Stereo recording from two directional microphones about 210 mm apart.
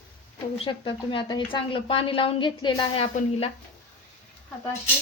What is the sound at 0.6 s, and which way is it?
A woman's voice, 25° left (ahead or behind).